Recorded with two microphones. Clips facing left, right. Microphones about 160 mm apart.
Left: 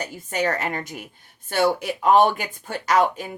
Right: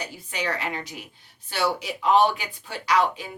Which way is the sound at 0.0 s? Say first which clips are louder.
Left 6 dB; 45° left (ahead or behind).